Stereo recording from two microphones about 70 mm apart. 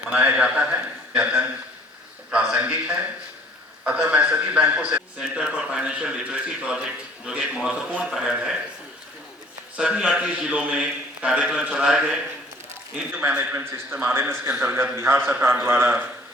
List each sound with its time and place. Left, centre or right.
0.1 s a man's voice: right
2.3 s a sound: centre
3.8 s a man's voice: centre
9.7 s a man's voice: centre
13.1 s a man's voice: right